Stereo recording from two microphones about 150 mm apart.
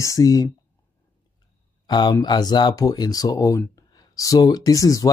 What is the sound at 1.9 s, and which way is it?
Speech, 30° left (ahead or behind).